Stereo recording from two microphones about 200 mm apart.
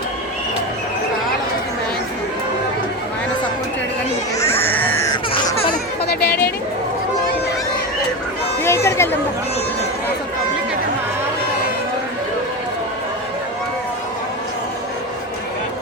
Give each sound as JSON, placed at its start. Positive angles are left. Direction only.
{"t": 4.6, "sound": "baby cry", "side_deg": 10}
{"t": 5.1, "sound": "music", "side_deg": 25}
{"t": 6.1, "sound": "a sound", "side_deg": 50}
{"t": 8.6, "sound": "chatter", "side_deg": 15}